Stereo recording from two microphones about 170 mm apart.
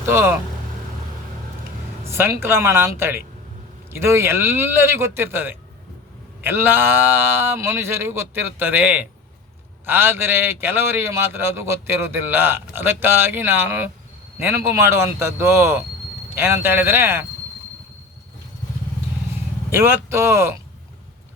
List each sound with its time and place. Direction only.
0.0 s a man's voice: 15° right (ahead or behind)
2.0 s a man's voice: 15° right (ahead or behind)
19.7 s a man's voice: 15° right (ahead or behind)